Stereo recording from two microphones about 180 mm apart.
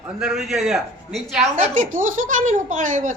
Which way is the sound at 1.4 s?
45° right (ahead or behind).